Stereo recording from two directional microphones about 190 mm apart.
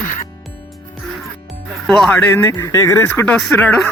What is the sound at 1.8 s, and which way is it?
Speech, centre (ahead or behind).